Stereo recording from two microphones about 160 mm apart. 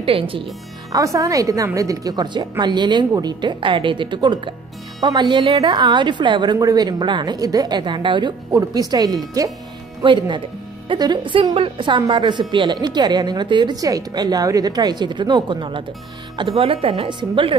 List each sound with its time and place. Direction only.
0.0 s speech: 35° right (ahead or behind)
0.9 s a woman's voice: 20° right (ahead or behind)